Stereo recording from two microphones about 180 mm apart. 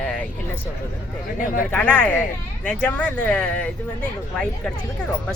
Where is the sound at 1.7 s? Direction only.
10° left (ahead or behind).